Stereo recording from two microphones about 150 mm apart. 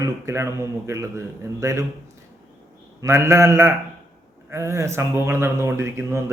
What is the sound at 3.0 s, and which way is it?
Mantra, 20° right (ahead or behind).